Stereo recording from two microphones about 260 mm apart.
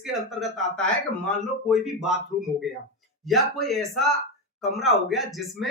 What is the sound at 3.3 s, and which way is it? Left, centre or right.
Speech, centre.